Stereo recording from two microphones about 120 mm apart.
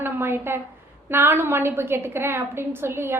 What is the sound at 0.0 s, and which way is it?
A woman's voice, 20° right (ahead or behind).